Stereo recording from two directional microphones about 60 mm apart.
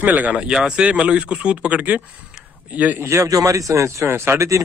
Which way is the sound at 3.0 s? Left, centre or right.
Right.